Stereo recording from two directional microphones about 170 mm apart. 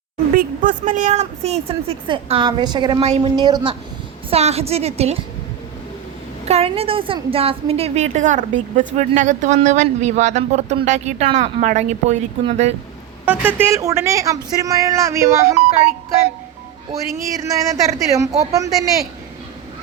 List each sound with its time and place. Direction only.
0.3 s a woman's voice: 50° right (ahead or behind); by 3.0 s 25° right (ahead or behind)
3.0 s a woman's voice: 40° right (ahead or behind)
3.3 s a woman's voice: 25° right (ahead or behind)
4.3 s a woman's voice: 40° right (ahead or behind)
6.4 s a woman's voice: 40° right (ahead or behind)
13.2 s speech: 10° right (ahead or behind)
16.9 s a woman's voice: 20° right (ahead or behind)